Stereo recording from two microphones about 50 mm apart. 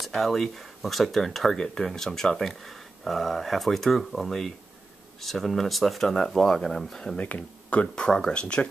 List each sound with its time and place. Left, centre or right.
0.0 s speech: centre
7.2 s speech: left
7.9 s speech: centre